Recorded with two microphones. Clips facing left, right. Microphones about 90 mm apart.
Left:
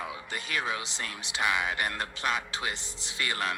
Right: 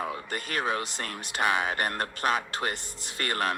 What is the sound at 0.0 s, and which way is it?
Speech, 50° right (ahead or behind).